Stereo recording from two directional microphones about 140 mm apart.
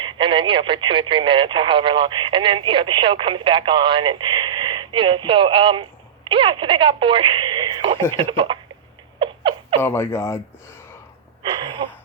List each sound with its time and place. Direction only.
0.0 s speech: 35° right (ahead or behind)
9.1 s a sound: 35° right (ahead or behind)
9.7 s speech: 15° left (ahead or behind)